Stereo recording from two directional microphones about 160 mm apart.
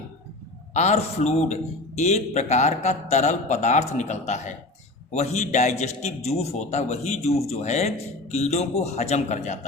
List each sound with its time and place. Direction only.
0.7 s a man's voice: 45° left (ahead or behind)